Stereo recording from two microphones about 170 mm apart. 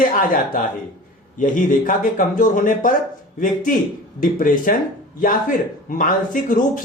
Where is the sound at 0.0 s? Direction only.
55° left (ahead or behind).